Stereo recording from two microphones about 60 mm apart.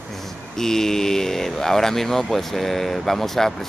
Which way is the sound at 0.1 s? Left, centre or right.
Centre.